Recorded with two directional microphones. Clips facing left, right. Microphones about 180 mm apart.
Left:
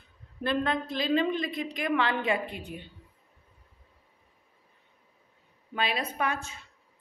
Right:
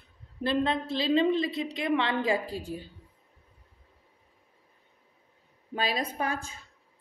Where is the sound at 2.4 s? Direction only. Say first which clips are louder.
Right 2 dB; 90° right.